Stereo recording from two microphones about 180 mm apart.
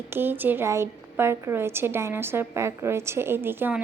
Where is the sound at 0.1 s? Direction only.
10° right (ahead or behind).